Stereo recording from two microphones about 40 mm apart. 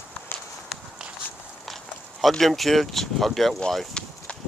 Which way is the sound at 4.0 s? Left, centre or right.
Centre.